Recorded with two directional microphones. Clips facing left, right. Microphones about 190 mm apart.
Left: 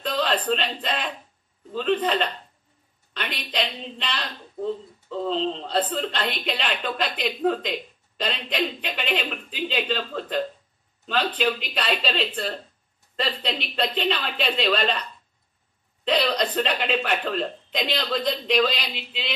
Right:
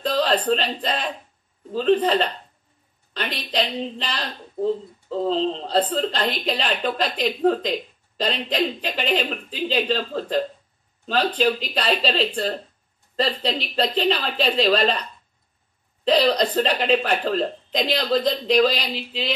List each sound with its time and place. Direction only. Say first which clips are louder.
0.0 s speech: right 4 dB; 35° right (ahead or behind)